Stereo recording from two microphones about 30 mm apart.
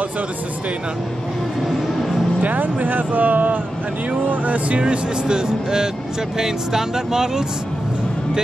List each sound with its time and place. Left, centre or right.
2.4 s speech: right
4.3 s speech: right
4.7 s speech: right; by 7.4 s centre